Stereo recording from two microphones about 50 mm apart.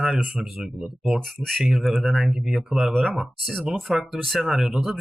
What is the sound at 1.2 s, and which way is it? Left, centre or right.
Speech, centre.